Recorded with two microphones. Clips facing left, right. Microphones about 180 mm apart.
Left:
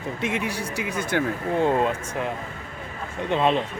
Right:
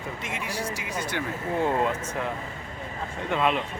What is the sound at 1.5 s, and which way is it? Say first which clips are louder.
A man's voice: left 3 dB; 20° left (ahead or behind).